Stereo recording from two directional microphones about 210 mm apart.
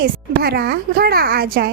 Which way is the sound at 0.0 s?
50° right (ahead or behind).